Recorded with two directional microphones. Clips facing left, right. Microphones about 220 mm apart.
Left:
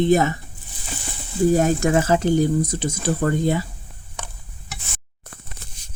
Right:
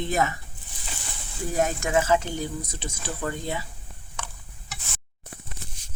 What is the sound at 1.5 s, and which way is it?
Speech, 35° left (ahead or behind).